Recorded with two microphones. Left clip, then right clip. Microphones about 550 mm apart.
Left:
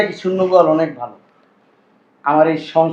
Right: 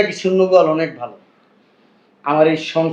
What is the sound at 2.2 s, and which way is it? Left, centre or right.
Speech, centre.